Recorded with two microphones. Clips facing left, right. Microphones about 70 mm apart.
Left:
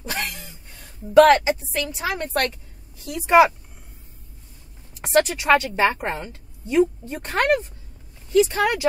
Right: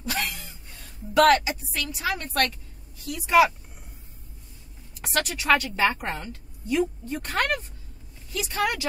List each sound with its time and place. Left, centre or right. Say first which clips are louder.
0.0 s a woman's voice: left 1 dB; left
5.0 s a woman's voice: left 6 dB; left